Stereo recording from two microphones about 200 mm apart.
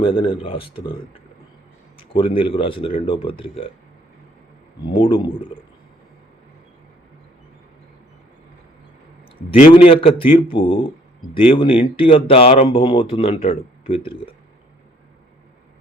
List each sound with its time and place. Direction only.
0.0 s speech: 25° left (ahead or behind)
2.0 s speech: 25° left (ahead or behind)
4.8 s speech: 25° left (ahead or behind)
9.5 s speech: 30° left (ahead or behind)